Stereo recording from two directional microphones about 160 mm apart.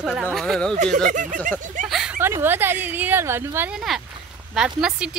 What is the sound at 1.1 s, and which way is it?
Speech, 50° right (ahead or behind).